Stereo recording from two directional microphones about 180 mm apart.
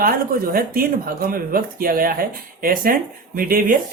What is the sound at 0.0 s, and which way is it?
Speech, 55° right (ahead or behind).